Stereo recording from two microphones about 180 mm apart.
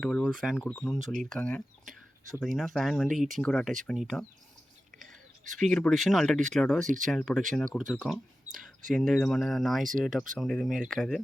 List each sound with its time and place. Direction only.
0.0 s a sound: 5° left (ahead or behind)
0.3 s speech: 5° right (ahead or behind)
0.9 s speech: 45° right (ahead or behind)
1.3 s speech: 5° left (ahead or behind)
5.6 s speech: centre (ahead or behind)